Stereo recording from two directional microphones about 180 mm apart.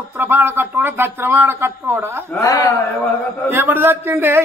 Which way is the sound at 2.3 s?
15° left (ahead or behind).